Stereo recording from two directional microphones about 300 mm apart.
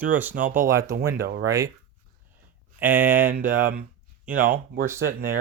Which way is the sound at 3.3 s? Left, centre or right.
Right.